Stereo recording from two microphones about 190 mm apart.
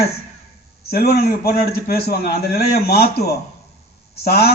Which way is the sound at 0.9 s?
55° left (ahead or behind).